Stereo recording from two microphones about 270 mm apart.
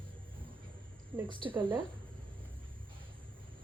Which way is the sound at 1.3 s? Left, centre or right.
Centre.